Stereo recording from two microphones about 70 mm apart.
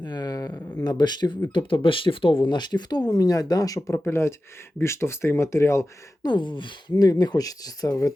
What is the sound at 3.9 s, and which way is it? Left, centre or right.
Speech, left.